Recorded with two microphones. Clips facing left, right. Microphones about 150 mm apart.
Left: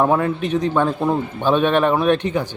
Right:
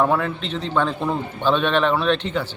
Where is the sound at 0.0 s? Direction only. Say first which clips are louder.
Left 3 dB; 15° left (ahead or behind).